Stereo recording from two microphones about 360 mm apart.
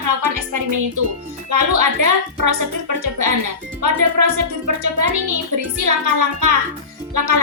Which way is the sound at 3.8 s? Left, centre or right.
Right.